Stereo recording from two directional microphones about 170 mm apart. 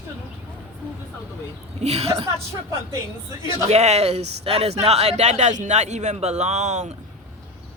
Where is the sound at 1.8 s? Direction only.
35° right (ahead or behind).